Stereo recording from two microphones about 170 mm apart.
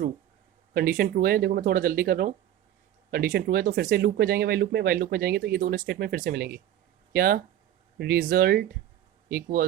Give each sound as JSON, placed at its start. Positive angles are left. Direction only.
{"t": 0.7, "sound": "speech", "side_deg": -60}